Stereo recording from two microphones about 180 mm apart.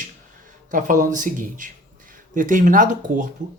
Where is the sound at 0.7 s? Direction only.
45° right (ahead or behind).